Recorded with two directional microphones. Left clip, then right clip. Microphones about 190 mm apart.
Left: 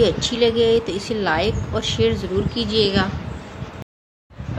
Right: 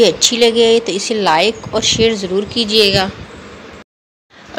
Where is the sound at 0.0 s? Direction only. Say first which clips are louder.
Right 7 dB; 10° right (ahead or behind).